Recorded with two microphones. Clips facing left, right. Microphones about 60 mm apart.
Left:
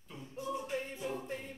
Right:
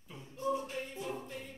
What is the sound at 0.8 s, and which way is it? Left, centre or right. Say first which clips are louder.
Music: left 1 dB; left.